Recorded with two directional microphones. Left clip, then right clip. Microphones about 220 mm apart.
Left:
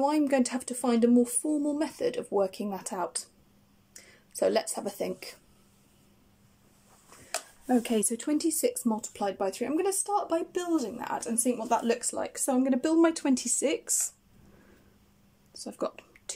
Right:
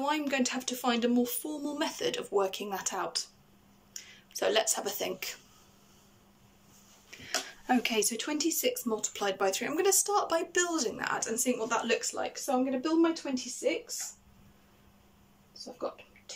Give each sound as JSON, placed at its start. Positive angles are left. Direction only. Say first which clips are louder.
{"t": 0.0, "sound": "speech", "louder": "left 4 dB", "side_deg": 25}
{"t": 7.6, "sound": "speech", "louder": "left 1 dB", "side_deg": 35}